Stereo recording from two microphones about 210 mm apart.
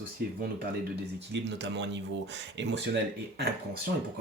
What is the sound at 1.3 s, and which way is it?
Speech, 55° right (ahead or behind).